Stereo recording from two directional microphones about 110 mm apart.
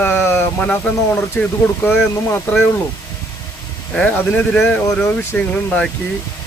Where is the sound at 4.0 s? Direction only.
10° left (ahead or behind).